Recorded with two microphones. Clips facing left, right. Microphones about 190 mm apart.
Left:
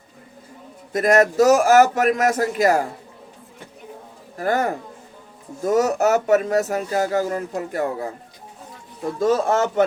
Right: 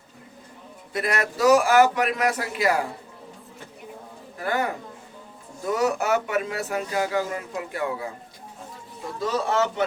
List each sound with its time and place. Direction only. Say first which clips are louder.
0.9 s speech: left 10 dB; 45° left (ahead or behind)
4.4 s speech: left 5 dB; 45° left (ahead or behind)
9.1 s speech: left 5 dB; 45° left (ahead or behind)